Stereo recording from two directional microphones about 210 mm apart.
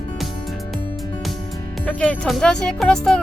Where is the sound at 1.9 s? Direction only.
5° left (ahead or behind).